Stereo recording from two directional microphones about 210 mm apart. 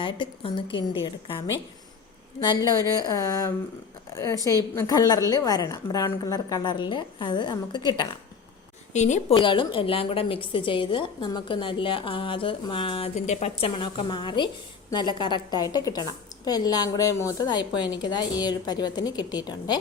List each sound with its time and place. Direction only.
0.0 s a woman's voice: 25° left (ahead or behind)
8.9 s a woman's voice: 35° left (ahead or behind)
9.3 s a woman's voice: 25° left (ahead or behind)